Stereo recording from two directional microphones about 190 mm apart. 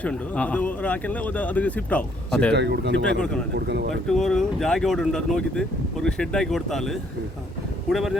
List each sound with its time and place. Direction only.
0.0 s speech: 5° left (ahead or behind)
2.5 s speech: 60° right (ahead or behind)
4.1 s speech: centre (ahead or behind)